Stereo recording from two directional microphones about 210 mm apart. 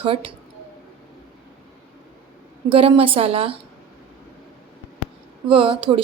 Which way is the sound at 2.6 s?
25° right (ahead or behind).